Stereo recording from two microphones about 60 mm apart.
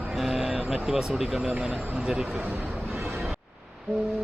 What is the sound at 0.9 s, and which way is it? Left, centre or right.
Speech, centre.